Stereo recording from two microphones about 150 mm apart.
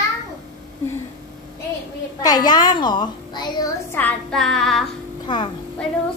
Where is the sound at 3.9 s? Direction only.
5° left (ahead or behind).